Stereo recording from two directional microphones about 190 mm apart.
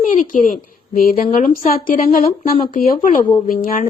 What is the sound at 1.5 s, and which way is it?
Speech, 45° left (ahead or behind).